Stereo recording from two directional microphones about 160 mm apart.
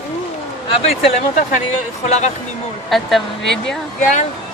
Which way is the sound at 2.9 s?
Centre (ahead or behind).